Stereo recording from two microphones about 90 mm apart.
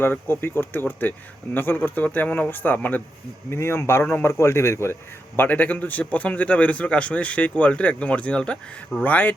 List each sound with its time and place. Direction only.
0.0 s a man's voice: 25° left (ahead or behind)